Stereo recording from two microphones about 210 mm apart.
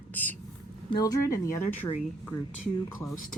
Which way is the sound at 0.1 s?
10° left (ahead or behind).